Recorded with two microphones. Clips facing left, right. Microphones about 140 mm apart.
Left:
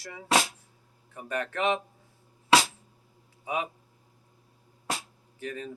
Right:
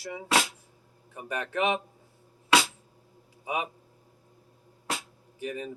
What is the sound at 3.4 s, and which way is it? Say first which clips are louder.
Speech: even; 15° right (ahead or behind).